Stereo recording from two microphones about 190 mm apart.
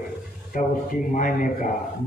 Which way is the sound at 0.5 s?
45° left (ahead or behind).